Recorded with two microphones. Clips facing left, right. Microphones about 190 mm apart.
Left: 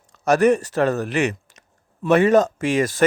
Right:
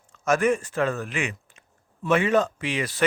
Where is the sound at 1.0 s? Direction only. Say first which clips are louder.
Left 8 dB; 70° left (ahead or behind).